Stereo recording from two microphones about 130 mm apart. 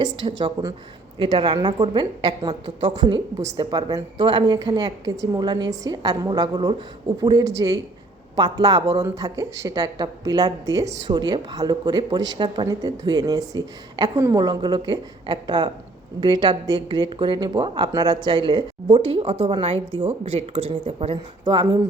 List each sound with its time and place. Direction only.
0.0 s speech: 35° right (ahead or behind)
21.4 s speech: 35° right (ahead or behind)